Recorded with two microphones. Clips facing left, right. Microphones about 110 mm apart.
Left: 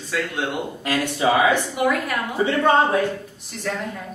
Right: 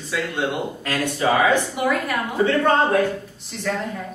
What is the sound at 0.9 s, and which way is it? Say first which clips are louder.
Speech: left 1 dB; 15° left (ahead or behind).